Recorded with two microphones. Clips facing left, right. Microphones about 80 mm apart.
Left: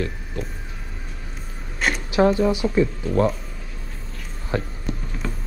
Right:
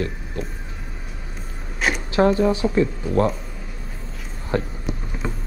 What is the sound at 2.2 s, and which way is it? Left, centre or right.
Speech, centre.